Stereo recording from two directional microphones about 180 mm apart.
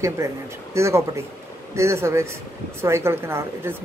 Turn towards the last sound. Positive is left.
turn(degrees=-15)  # may be behind; listen again after turning